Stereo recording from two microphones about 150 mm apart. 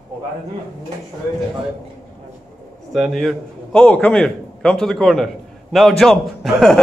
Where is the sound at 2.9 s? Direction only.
Centre (ahead or behind).